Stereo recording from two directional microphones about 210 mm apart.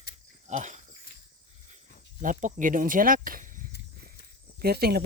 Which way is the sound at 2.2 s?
40° right (ahead or behind).